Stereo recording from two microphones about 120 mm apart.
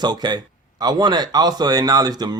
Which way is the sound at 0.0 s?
35° right (ahead or behind).